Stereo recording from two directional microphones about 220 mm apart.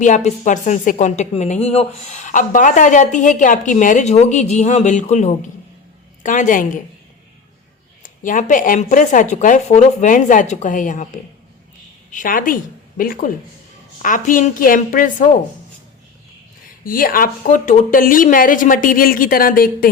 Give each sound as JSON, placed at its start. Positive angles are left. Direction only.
{"t": 0.0, "sound": "a woman's voice", "side_deg": 35}
{"t": 8.0, "sound": "a woman's voice", "side_deg": 35}
{"t": 12.1, "sound": "a woman's voice", "side_deg": 40}
{"t": 16.8, "sound": "a woman's voice", "side_deg": 40}